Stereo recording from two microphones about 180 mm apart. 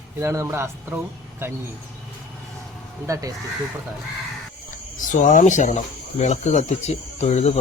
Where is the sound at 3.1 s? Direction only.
15° right (ahead or behind).